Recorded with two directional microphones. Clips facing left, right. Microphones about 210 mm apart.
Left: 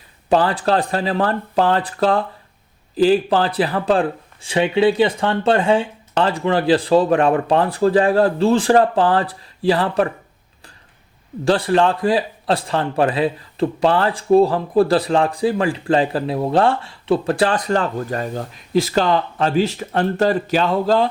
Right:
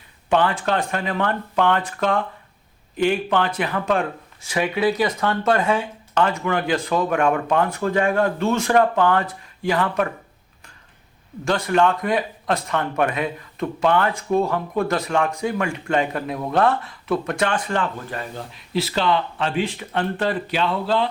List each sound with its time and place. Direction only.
0.3 s a man's voice: 35° left (ahead or behind)
11.4 s a man's voice: 30° left (ahead or behind)